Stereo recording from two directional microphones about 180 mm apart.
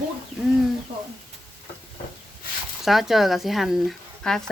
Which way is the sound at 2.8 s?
Centre (ahead or behind).